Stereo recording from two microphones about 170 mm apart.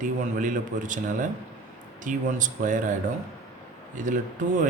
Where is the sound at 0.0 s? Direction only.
50° right (ahead or behind).